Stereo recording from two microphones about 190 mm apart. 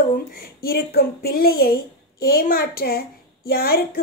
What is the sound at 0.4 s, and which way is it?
A woman's voice, 55° left (ahead or behind).